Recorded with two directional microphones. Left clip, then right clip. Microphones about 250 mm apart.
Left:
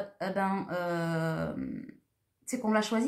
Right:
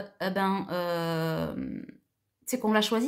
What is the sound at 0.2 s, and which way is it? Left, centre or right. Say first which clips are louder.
Speech: right 3 dB; right.